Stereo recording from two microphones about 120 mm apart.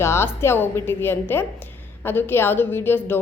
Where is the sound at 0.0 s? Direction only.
20° left (ahead or behind).